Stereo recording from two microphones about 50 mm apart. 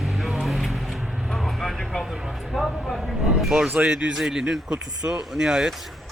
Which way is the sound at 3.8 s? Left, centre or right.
Centre.